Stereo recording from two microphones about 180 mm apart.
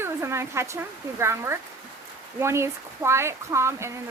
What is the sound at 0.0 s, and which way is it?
Speech, 15° right (ahead or behind).